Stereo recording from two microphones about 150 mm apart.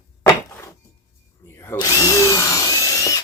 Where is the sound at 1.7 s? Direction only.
25° left (ahead or behind).